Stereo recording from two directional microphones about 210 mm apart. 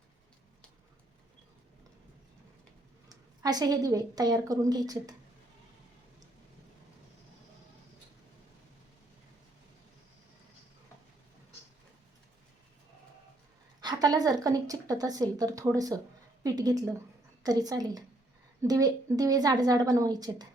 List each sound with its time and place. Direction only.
3.1 s a woman's voice: 20° right (ahead or behind)
13.8 s a woman's voice: 20° right (ahead or behind)